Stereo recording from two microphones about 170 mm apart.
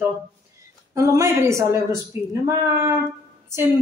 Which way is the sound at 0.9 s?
20° right (ahead or behind).